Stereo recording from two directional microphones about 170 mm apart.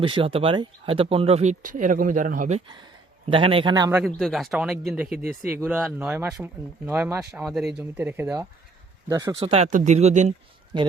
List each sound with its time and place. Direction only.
0.0 s speech: 30° right (ahead or behind); by 2.6 s 50° right (ahead or behind)
2.6 s speech: 30° right (ahead or behind)
3.9 s speech: centre (ahead or behind)
5.1 s speech: 60° right (ahead or behind)
5.5 s speech: 10° right (ahead or behind)
9.4 s speech: 35° right (ahead or behind)
10.7 s speech: 30° right (ahead or behind)